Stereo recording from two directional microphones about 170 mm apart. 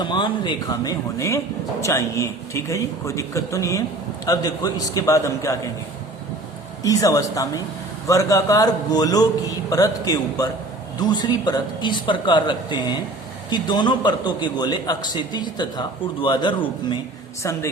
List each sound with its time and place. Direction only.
0.0 s a man's voice: 25° left (ahead or behind)
1.8 s a man's voice: 15° left (ahead or behind)
6.8 s a man's voice: 20° left (ahead or behind)
17.4 s a man's voice: 15° left (ahead or behind)